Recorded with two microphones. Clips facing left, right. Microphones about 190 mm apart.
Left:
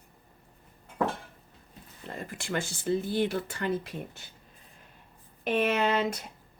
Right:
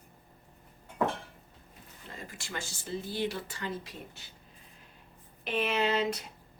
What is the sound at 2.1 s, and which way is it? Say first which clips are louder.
Speech: left 8 dB; 55° left (ahead or behind).